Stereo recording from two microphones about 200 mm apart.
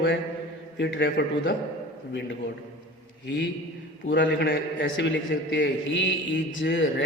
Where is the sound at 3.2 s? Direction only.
65° left (ahead or behind).